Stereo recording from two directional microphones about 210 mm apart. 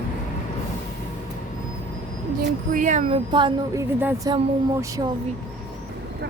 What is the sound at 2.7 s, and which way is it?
Speech, 35° right (ahead or behind).